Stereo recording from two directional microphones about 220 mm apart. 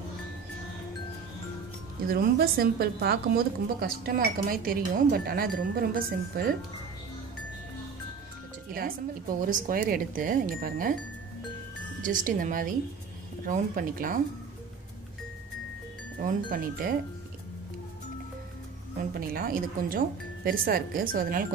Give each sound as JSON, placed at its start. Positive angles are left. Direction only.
{"t": 2.0, "sound": "a woman's voice", "side_deg": -45}
{"t": 9.4, "sound": "speech", "side_deg": -40}
{"t": 12.0, "sound": "speech", "side_deg": -35}
{"t": 16.2, "sound": "speech", "side_deg": -40}
{"t": 19.1, "sound": "speech", "side_deg": -40}